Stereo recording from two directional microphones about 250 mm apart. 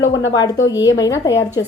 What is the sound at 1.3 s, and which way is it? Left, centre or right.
Speech, left.